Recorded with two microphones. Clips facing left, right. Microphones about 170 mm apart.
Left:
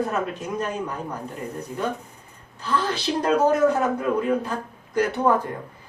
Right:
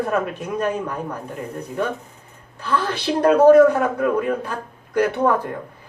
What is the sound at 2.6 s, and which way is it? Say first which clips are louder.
A man's voice: right 2 dB; 60° right (ahead or behind).